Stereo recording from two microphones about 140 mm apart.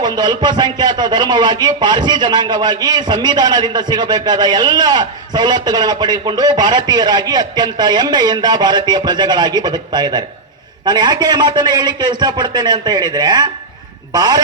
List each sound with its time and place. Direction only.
0.0 s a man's voice: 30° right (ahead or behind)